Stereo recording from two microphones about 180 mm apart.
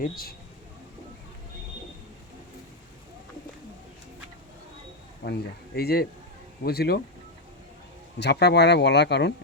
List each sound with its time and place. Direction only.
0.0 s speech: 55° left (ahead or behind)
5.2 s speech: 60° left (ahead or behind)
8.2 s speech: 70° left (ahead or behind)